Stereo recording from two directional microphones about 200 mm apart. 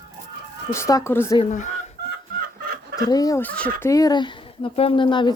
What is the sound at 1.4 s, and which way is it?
Speech, 40° left (ahead or behind).